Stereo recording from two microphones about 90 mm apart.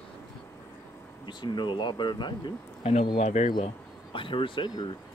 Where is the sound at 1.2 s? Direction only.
55° left (ahead or behind).